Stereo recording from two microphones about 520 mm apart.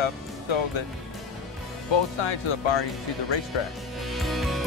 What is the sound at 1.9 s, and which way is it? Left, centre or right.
Speech, left.